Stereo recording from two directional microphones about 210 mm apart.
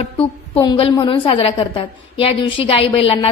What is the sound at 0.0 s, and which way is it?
A woman's voice, 25° left (ahead or behind).